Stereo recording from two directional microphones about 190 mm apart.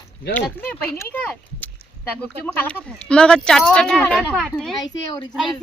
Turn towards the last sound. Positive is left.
turn(degrees=0)  # may be behind; listen again after turning